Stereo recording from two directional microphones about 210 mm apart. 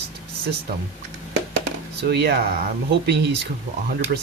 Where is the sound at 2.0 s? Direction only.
50° right (ahead or behind).